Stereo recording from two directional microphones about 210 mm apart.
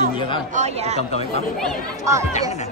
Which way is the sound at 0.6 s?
30° right (ahead or behind).